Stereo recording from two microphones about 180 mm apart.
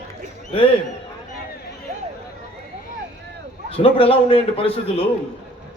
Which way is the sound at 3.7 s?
30° left (ahead or behind).